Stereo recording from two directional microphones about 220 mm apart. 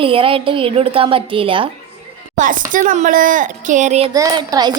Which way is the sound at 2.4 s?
35° right (ahead or behind).